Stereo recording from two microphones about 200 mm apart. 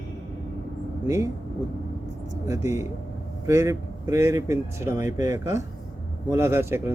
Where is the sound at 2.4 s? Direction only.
15° right (ahead or behind).